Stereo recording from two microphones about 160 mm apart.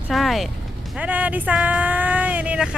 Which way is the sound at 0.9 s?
10° right (ahead or behind).